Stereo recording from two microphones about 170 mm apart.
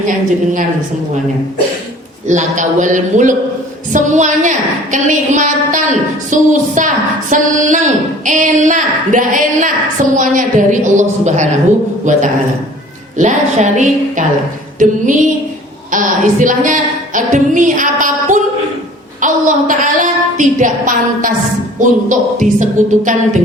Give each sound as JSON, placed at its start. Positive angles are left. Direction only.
{"t": 2.2, "sound": "a woman's voice", "side_deg": -45}
{"t": 15.9, "sound": "a woman's voice", "side_deg": -50}